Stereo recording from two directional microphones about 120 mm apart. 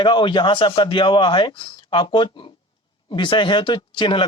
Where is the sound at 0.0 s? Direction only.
40° left (ahead or behind).